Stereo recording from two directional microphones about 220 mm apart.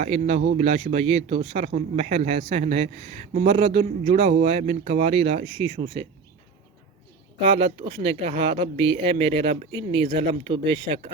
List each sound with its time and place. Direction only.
0.0 s a man's voice: 30° right (ahead or behind)
7.6 s a man's voice: 25° right (ahead or behind)